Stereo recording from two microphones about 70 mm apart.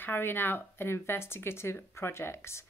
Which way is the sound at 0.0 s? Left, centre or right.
Left.